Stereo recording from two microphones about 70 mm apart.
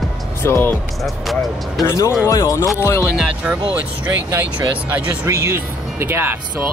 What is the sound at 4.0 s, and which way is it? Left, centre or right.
Speech, right.